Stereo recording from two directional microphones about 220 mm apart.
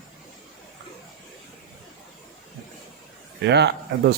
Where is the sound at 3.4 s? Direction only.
50° right (ahead or behind).